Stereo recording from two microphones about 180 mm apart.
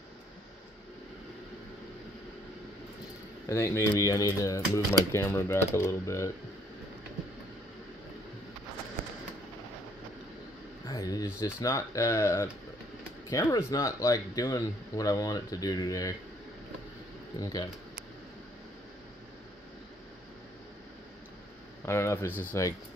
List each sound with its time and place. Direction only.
3.4 s speech: 15° left (ahead or behind)
10.9 s speech: 20° left (ahead or behind)
17.4 s speech: 20° left (ahead or behind)
21.8 s speech: 15° left (ahead or behind)